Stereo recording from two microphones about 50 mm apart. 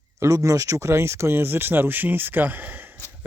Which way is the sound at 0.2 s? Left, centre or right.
Right.